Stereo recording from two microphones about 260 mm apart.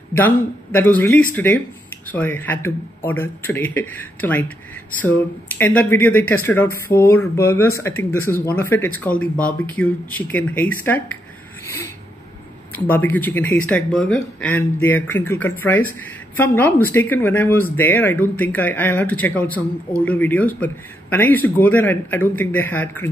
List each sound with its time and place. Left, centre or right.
0.1 s a woman's voice: centre
11.6 s a sound: centre
12.7 s a woman's voice: centre